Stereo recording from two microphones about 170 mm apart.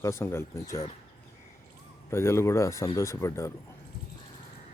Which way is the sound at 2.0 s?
15° left (ahead or behind).